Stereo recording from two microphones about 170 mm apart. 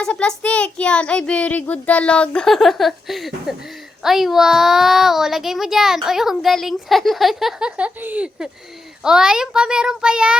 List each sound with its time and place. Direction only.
0.0 s a child's voice: 5° left (ahead or behind)